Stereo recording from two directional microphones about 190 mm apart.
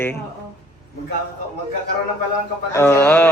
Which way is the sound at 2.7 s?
15° left (ahead or behind).